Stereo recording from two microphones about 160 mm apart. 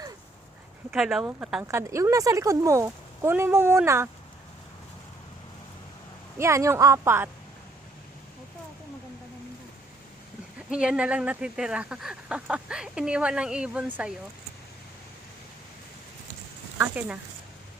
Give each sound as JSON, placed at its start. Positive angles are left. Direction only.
{"t": 0.9, "sound": "speech", "side_deg": -5}
{"t": 1.6, "sound": "speech", "side_deg": -20}
{"t": 6.4, "sound": "speech", "side_deg": -20}
{"t": 10.7, "sound": "speech", "side_deg": -5}
{"t": 16.7, "sound": "speech", "side_deg": -10}